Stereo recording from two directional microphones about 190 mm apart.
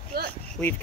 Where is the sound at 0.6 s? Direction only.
5° left (ahead or behind).